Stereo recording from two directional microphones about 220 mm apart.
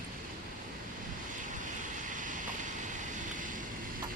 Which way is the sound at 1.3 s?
35° right (ahead or behind).